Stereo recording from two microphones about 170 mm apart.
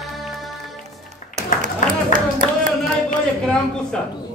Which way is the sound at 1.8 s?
50° left (ahead or behind).